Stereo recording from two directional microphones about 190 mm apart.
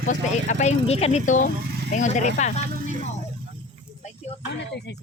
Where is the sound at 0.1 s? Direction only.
45° left (ahead or behind).